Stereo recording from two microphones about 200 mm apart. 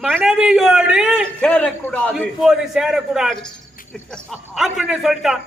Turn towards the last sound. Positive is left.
turn(degrees=0)  # may be behind; listen again after turning